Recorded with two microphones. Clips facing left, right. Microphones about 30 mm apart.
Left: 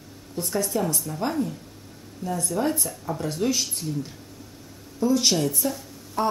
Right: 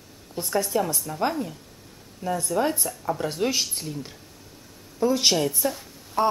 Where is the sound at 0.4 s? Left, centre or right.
Centre.